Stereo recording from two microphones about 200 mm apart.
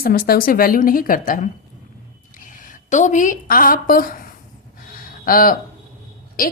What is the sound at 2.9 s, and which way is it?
A woman's voice, 35° left (ahead or behind).